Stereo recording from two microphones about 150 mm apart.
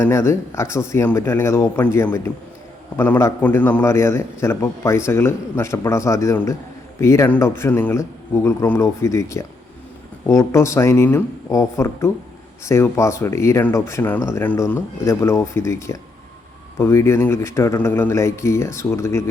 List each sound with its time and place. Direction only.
0.0 s a man's voice: 20° left (ahead or behind)